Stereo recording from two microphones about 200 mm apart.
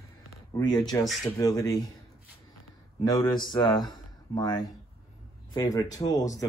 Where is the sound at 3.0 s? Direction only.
20° left (ahead or behind).